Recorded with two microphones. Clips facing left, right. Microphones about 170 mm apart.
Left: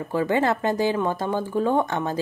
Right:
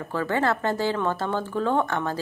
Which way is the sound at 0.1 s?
15° left (ahead or behind).